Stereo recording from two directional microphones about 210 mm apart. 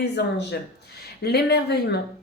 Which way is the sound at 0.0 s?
50° left (ahead or behind).